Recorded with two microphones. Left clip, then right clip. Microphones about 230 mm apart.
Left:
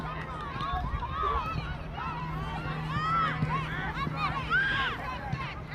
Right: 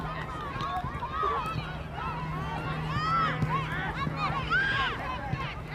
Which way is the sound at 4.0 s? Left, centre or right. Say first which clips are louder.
Left 2 dB; left.